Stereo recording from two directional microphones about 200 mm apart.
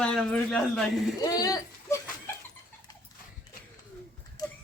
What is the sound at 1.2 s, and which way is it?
Speech, 20° left (ahead or behind).